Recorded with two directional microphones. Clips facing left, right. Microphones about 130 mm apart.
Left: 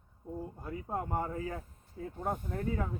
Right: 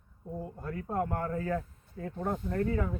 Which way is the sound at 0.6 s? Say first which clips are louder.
Right 6 dB; 75° right (ahead or behind).